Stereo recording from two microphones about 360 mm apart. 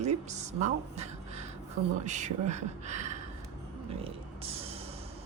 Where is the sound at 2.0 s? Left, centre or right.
Centre.